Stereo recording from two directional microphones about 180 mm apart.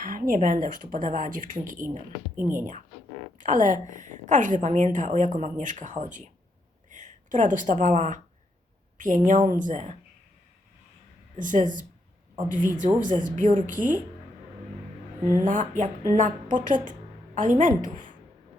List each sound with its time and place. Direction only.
0.0 s a woman's voice: 50° right (ahead or behind)
2.3 s speech: 10° right (ahead or behind)
2.6 s a woman's voice: 45° right (ahead or behind)
11.3 s a woman's voice: 45° right (ahead or behind)
15.4 s a woman's voice: 45° right (ahead or behind)